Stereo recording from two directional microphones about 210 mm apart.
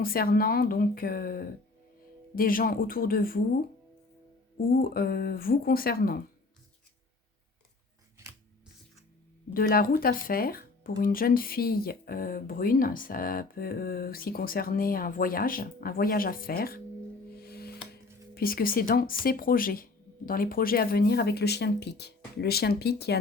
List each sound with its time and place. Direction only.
0.0 s speech: 45° left (ahead or behind)
4.7 s speech: 45° left (ahead or behind)
9.5 s speech: 45° left (ahead or behind)
17.3 s music: 45° left (ahead or behind)
18.3 s speech: 45° left (ahead or behind)